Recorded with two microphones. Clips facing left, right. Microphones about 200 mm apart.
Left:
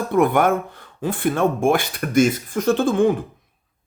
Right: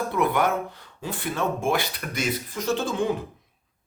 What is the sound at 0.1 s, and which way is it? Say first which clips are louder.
Speech: left 8 dB; 50° left (ahead or behind).